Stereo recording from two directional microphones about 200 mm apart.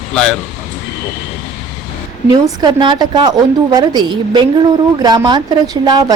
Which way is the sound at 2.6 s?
20° right (ahead or behind).